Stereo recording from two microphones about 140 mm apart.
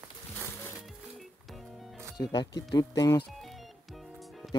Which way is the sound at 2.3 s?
30° left (ahead or behind).